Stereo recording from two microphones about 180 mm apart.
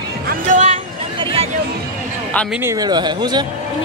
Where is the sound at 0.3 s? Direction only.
40° right (ahead or behind).